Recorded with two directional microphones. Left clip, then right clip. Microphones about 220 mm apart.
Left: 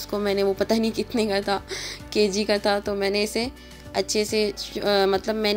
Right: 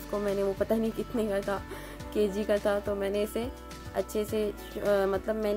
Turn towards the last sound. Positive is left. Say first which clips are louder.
# left 7 dB
turn(degrees=25)  # may be behind; listen again after turning